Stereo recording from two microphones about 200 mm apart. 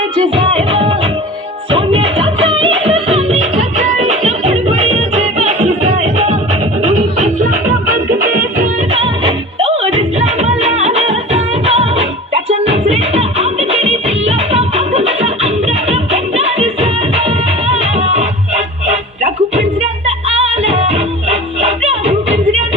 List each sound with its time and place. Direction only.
0.2 s music: 30° right (ahead or behind); by 8.7 s 45° right (ahead or behind)
8.9 s music: 30° right (ahead or behind)